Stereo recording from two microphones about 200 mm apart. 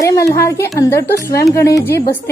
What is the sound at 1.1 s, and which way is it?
Speech, 50° left (ahead or behind).